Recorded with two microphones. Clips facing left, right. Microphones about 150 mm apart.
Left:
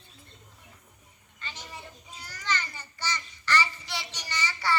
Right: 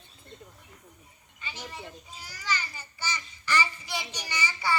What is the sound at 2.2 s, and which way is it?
A child's voice, 10° right (ahead or behind).